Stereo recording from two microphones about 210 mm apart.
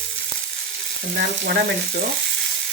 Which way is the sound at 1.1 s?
50° right (ahead or behind).